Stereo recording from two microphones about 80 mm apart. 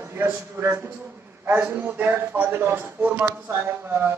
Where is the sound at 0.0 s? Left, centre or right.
Right.